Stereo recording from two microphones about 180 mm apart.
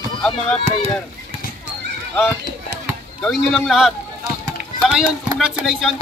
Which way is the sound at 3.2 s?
Centre (ahead or behind).